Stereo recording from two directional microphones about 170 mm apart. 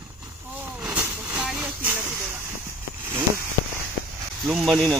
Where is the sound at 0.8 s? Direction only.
5° right (ahead or behind).